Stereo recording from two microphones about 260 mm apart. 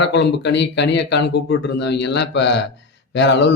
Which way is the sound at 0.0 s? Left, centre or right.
Left.